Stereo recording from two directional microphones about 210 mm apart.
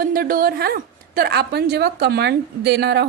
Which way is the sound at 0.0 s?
45° right (ahead or behind).